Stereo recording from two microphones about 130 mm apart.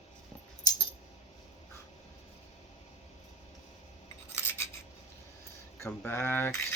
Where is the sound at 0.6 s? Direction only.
30° left (ahead or behind).